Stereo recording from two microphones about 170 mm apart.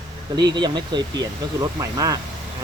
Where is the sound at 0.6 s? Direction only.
25° right (ahead or behind).